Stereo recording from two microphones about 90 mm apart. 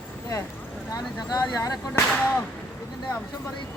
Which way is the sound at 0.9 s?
40° left (ahead or behind).